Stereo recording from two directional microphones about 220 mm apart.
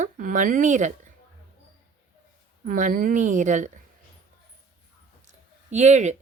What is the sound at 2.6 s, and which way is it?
Speech, 35° right (ahead or behind).